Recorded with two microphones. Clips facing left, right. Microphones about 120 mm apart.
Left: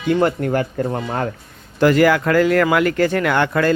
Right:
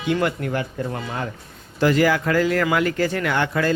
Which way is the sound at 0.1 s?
40° left (ahead or behind).